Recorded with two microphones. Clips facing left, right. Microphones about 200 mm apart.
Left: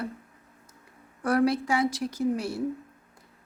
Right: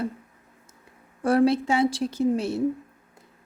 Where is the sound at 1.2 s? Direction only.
25° right (ahead or behind).